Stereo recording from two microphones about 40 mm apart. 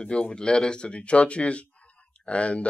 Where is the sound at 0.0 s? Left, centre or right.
Left.